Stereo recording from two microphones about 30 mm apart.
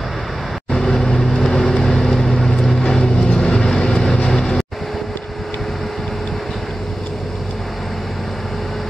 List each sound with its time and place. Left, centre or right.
0.7 s vehicle: centre